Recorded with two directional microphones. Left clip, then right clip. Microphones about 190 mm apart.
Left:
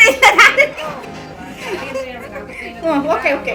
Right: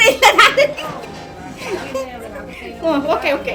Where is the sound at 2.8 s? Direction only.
20° right (ahead or behind).